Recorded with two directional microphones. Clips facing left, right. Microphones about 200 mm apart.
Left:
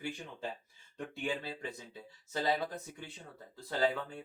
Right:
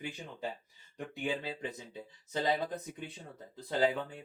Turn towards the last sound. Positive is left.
turn(degrees=-15)  # may be behind; listen again after turning